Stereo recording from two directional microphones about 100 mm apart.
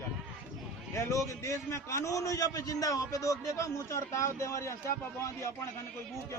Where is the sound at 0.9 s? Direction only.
30° left (ahead or behind).